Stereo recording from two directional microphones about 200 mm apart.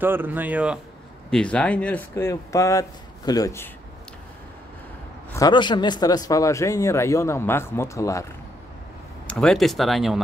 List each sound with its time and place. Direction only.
0.0 s speech: 10° right (ahead or behind)
1.3 s a man's voice: 5° left (ahead or behind)
5.3 s a man's voice: 20° left (ahead or behind)
9.3 s speech: 5° left (ahead or behind)